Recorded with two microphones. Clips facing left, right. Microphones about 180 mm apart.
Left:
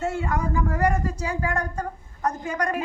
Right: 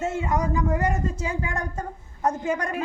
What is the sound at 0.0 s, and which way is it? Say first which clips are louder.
Speech: right 1 dB; 20° right (ahead or behind).